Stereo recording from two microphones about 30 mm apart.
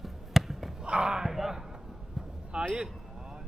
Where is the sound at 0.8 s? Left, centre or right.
Right.